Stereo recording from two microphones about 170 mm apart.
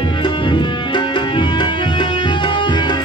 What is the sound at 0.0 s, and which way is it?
Music, 30° left (ahead or behind).